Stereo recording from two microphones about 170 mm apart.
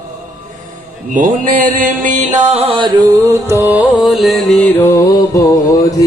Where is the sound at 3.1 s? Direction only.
15° right (ahead or behind).